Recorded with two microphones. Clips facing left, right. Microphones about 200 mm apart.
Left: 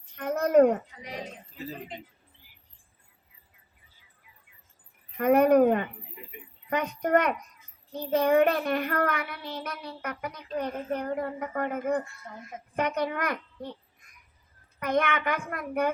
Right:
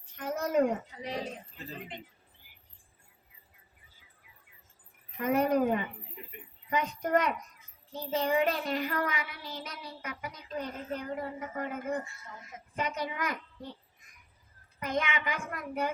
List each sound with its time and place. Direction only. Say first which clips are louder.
0.2 s a sound: left 7 dB; 60° left (ahead or behind)
5.1 s a woman's voice: left 7 dB; 60° left (ahead or behind)
14.8 s a child's voice: left 6 dB; 60° left (ahead or behind)